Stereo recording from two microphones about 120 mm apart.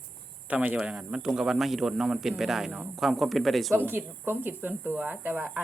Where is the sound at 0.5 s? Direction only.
10° right (ahead or behind).